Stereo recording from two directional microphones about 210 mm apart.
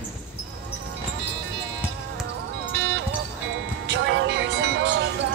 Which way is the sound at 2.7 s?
60° right (ahead or behind).